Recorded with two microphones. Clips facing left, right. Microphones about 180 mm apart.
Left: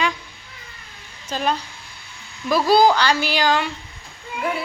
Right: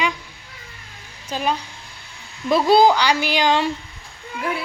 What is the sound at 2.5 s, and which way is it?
A woman's voice, 25° right (ahead or behind).